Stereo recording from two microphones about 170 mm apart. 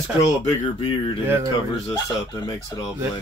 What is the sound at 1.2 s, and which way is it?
Speech, 15° right (ahead or behind).